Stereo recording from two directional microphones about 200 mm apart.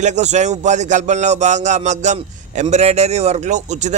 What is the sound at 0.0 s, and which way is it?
Speech, 35° right (ahead or behind).